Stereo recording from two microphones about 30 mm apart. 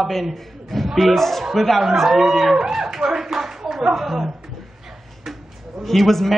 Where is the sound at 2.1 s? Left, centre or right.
Centre.